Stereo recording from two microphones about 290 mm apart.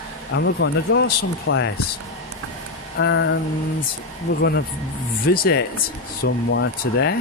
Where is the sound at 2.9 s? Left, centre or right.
Left.